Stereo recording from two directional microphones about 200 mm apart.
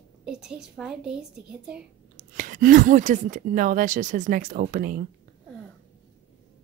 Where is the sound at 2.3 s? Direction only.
40° right (ahead or behind).